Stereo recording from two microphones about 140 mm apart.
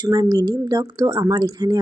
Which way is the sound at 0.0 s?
30° right (ahead or behind).